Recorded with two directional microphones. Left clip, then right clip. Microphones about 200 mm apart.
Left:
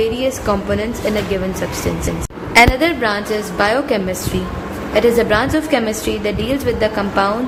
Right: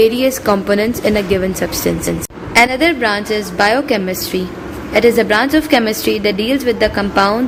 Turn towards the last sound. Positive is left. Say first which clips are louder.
# right 3 dB
turn(degrees=-30)  # may be behind; listen again after turning